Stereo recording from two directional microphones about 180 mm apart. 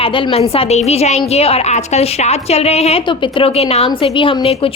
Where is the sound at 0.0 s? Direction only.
30° left (ahead or behind).